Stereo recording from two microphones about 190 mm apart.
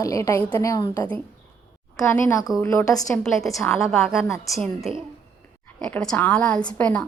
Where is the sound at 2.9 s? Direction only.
Centre (ahead or behind).